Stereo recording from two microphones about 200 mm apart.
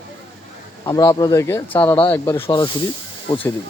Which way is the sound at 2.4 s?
25° left (ahead or behind).